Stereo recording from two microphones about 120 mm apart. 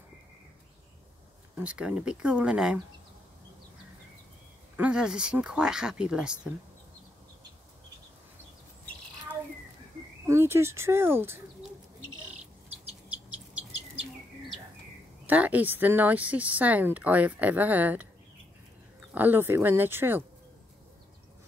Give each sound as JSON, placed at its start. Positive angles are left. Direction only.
{"t": 1.6, "sound": "speech", "side_deg": -10}
{"t": 4.7, "sound": "speech", "side_deg": -10}
{"t": 10.2, "sound": "speech", "side_deg": -20}
{"t": 15.2, "sound": "speech", "side_deg": -15}
{"t": 19.1, "sound": "speech", "side_deg": -15}